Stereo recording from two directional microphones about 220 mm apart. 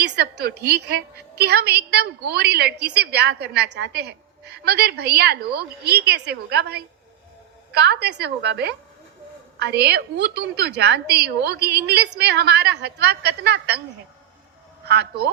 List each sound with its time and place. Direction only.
0.0 s a woman's voice: 50° right (ahead or behind)
14.8 s a woman's voice: 50° right (ahead or behind)